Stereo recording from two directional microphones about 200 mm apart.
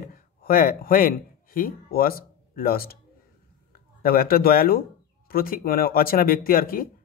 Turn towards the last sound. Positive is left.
turn(degrees=45)  # may be behind; listen again after turning